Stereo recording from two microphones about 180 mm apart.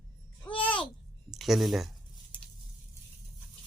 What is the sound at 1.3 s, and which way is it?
Speech, centre (ahead or behind).